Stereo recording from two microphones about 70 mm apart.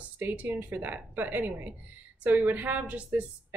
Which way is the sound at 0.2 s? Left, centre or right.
Right.